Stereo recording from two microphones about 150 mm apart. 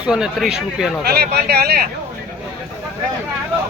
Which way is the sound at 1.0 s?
90° right.